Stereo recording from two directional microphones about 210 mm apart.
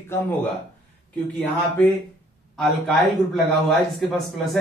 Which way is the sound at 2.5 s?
Centre (ahead or behind).